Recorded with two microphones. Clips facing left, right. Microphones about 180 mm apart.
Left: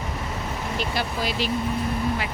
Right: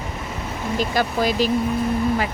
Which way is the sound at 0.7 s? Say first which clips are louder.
Right 8 dB; 45° right (ahead or behind).